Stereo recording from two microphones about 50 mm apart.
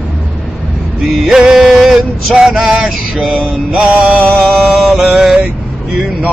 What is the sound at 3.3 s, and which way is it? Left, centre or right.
Mantra, right.